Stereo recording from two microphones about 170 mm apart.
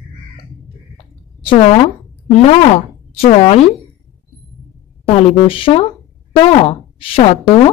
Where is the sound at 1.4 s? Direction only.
35° left (ahead or behind).